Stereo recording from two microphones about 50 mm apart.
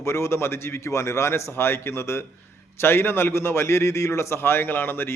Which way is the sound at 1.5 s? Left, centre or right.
Left.